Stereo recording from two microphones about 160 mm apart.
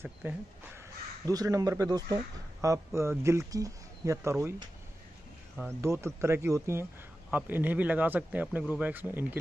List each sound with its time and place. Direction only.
0.2 s speech: 15° right (ahead or behind)
5.7 s speech: 15° right (ahead or behind)